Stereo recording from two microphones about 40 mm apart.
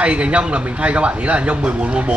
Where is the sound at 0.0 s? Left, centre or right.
Right.